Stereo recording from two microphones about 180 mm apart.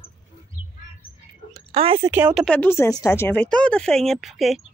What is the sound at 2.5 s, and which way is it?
Speech, 10° left (ahead or behind).